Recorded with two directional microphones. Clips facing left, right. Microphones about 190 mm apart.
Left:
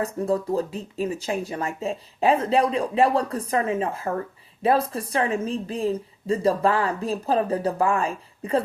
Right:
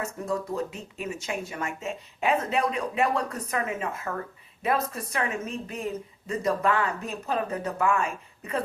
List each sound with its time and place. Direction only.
0.0 s speech: 35° left (ahead or behind)